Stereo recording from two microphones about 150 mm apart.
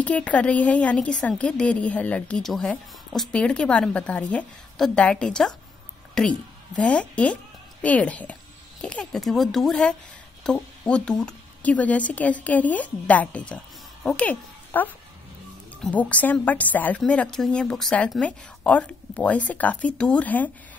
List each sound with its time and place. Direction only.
0.0 s a woman's voice: 10° left (ahead or behind)